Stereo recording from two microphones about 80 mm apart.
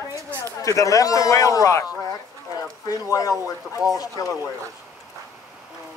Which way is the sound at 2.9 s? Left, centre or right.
Left.